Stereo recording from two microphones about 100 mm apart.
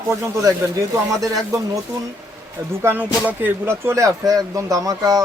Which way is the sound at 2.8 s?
20° right (ahead or behind).